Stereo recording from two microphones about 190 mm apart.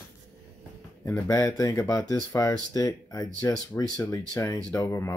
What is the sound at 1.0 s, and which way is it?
Speech, 15° left (ahead or behind).